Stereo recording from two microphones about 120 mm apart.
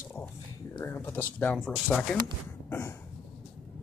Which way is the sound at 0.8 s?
20° left (ahead or behind).